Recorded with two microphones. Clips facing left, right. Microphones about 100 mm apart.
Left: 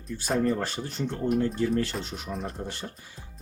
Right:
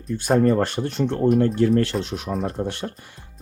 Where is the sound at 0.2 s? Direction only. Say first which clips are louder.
Right 8 dB; 60° right (ahead or behind).